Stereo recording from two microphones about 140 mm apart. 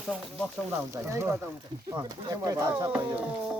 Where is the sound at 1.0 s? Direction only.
20° right (ahead or behind).